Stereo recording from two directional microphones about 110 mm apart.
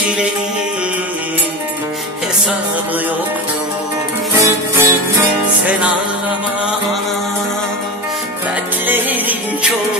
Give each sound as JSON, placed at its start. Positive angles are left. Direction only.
{"t": 4.4, "sound": "music", "side_deg": -20}
{"t": 8.8, "sound": "music", "side_deg": -15}